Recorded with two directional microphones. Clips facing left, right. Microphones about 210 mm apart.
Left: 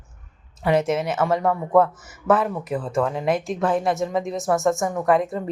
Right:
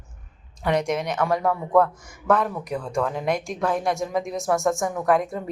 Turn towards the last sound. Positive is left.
turn(degrees=0)  # may be behind; listen again after turning